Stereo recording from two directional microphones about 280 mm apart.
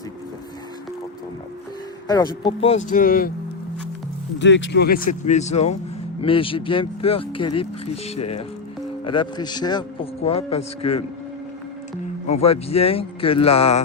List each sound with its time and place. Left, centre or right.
2.0 s speech: centre; by 3.3 s left
4.4 s speech: left
12.3 s speech: left